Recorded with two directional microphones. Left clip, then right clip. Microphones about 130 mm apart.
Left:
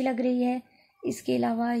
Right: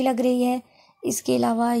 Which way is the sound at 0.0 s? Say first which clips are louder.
Right 5 dB; 30° right (ahead or behind).